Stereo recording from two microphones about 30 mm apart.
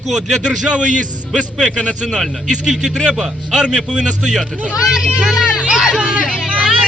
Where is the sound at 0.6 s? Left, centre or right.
Right.